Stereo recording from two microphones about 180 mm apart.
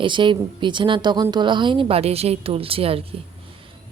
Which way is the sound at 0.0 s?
25° right (ahead or behind).